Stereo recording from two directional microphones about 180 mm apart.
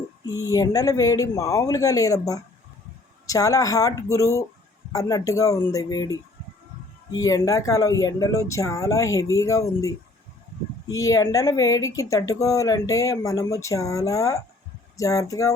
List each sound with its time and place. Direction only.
0.5 s speech: 20° left (ahead or behind)